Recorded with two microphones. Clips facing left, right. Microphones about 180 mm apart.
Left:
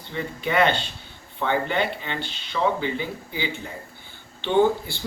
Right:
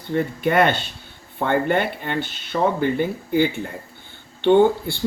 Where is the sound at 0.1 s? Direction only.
50° right (ahead or behind).